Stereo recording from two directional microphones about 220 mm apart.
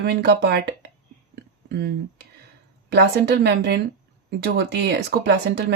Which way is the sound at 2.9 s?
50° right (ahead or behind).